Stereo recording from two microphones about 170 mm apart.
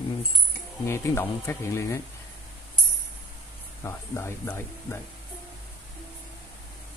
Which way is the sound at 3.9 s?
15° left (ahead or behind).